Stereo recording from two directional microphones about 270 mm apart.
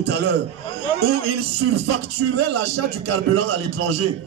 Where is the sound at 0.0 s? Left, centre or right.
Right.